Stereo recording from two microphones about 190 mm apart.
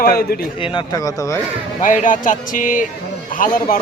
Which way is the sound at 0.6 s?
25° left (ahead or behind).